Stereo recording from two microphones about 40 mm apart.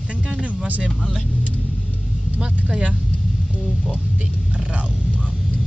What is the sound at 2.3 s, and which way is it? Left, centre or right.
Speech, centre.